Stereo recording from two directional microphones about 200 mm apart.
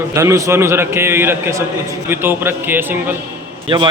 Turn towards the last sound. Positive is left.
turn(degrees=-25)  # may be behind; listen again after turning